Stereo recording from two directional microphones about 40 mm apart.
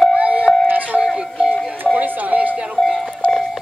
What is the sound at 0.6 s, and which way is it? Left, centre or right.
Music, right.